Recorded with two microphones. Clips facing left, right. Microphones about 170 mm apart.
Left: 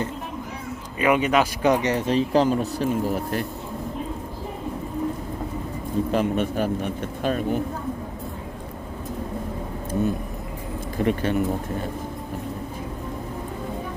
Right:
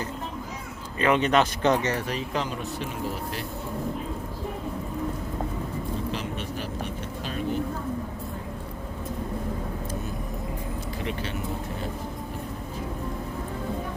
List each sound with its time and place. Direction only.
0.9 s speech: 10° left (ahead or behind)
2.0 s speech: 30° left (ahead or behind)
6.1 s speech: 50° left (ahead or behind)
10.9 s speech: 50° left (ahead or behind)